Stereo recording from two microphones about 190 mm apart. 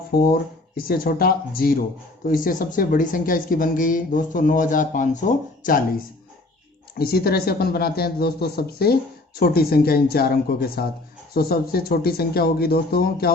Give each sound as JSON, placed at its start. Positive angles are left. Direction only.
{"t": 0.1, "sound": "speech", "side_deg": 50}
{"t": 7.0, "sound": "speech", "side_deg": 55}